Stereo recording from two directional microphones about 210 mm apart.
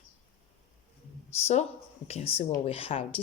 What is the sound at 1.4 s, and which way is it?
Speech, 30° left (ahead or behind).